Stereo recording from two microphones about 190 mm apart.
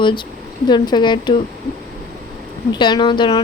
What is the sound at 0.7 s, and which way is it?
Speech, 25° left (ahead or behind).